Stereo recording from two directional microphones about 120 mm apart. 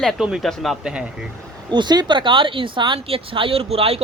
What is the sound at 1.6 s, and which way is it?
Speech, 40° right (ahead or behind).